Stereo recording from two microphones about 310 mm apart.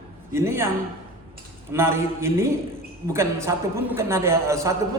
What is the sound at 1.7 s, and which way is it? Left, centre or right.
A man's voice, centre.